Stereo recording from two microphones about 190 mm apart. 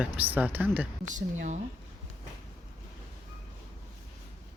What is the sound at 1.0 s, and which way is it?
Speech, 40° right (ahead or behind).